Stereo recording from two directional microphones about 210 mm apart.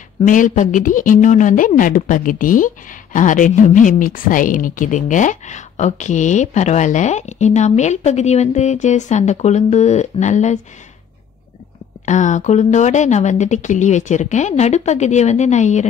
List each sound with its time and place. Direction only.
0.2 s a woman's voice: 35° left (ahead or behind)
12.1 s a woman's voice: 35° left (ahead or behind)